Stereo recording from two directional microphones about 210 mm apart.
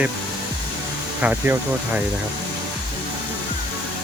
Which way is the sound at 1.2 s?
5° right (ahead or behind).